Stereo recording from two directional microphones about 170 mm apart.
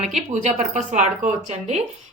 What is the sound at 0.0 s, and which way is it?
A woman's voice, 45° right (ahead or behind).